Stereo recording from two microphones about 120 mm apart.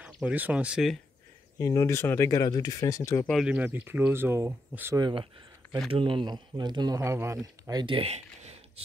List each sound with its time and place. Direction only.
0.0 s speech: 10° right (ahead or behind)
1.6 s speech: 25° left (ahead or behind)
3.4 s speech: 10° right (ahead or behind)
4.9 s speech: 40° right (ahead or behind)
7.0 s speech: 20° right (ahead or behind)
7.8 s speech: 50° right (ahead or behind)